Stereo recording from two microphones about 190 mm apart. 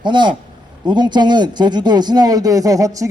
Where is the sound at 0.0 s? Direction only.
25° right (ahead or behind).